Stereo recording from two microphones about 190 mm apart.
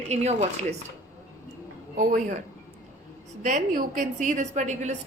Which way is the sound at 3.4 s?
40° right (ahead or behind).